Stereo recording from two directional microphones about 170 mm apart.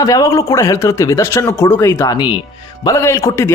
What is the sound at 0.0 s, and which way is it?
A man's voice, 20° left (ahead or behind).